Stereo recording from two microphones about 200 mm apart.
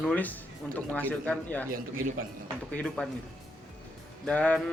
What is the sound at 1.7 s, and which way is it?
Speech, 45° right (ahead or behind).